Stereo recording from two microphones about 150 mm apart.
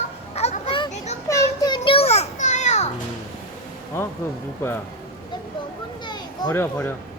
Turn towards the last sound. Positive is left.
turn(degrees=15)  # may be behind; listen again after turning